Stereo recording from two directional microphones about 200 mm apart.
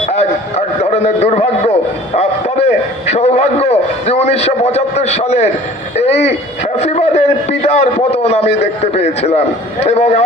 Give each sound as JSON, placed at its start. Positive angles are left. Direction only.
{"t": 0.8, "sound": "a man's voice", "side_deg": 35}